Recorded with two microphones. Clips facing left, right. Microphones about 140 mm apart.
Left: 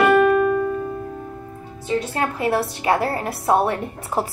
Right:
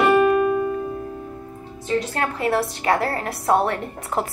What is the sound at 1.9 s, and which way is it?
A woman's voice, 10° left (ahead or behind).